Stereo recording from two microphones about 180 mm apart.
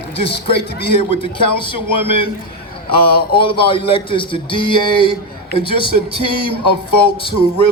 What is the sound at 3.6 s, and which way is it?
Speech, 30° left (ahead or behind).